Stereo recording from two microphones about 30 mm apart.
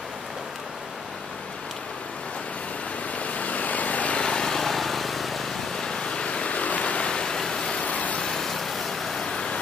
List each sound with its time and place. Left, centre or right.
3.2 s vehicle: left
4.1 s vehicle: left
4.7 s vehicle: centre
5.8 s vehicle: left
7.1 s vehicle: left
7.8 s vehicle: left
8.2 s vehicle: centre
9.2 s vehicle: left